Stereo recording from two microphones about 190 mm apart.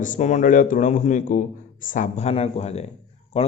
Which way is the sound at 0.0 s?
40° left (ahead or behind).